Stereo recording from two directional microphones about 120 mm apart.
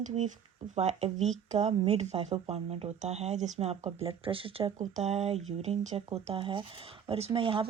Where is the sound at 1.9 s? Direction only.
60° right (ahead or behind).